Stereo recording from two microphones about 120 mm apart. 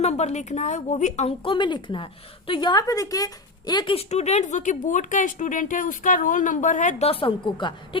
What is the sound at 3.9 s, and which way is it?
Speech, 65° left (ahead or behind).